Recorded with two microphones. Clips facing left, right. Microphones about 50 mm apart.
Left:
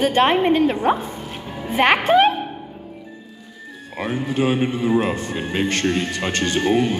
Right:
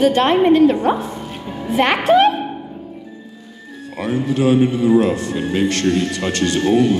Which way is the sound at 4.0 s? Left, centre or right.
Left.